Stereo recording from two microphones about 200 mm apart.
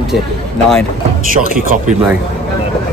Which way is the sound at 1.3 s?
45° right (ahead or behind).